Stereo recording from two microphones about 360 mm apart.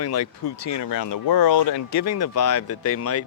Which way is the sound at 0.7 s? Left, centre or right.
Left.